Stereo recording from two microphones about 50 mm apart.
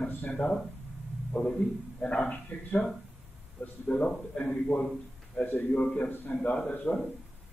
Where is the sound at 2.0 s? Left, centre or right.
Left.